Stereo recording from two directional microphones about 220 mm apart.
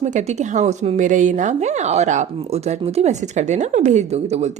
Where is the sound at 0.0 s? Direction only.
30° right (ahead or behind).